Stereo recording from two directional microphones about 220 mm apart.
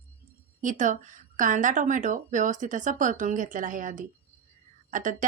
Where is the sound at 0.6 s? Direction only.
35° right (ahead or behind).